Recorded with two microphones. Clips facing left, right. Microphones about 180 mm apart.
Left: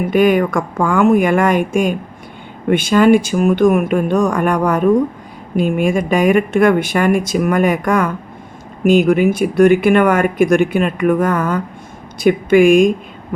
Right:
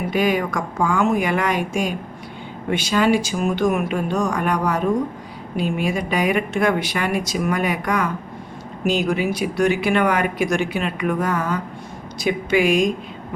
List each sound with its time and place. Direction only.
0.1 s speech: 55° left (ahead or behind)